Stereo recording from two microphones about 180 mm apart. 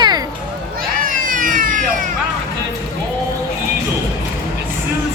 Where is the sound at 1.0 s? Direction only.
50° right (ahead or behind).